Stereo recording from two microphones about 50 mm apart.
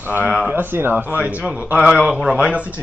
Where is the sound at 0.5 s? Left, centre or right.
Right.